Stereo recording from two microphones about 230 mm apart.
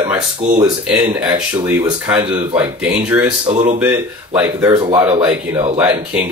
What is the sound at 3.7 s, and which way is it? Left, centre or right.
Speech, centre.